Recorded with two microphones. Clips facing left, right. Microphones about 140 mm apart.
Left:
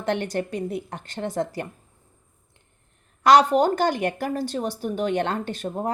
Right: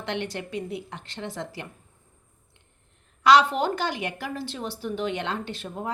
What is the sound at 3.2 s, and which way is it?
A woman's voice, 45° left (ahead or behind).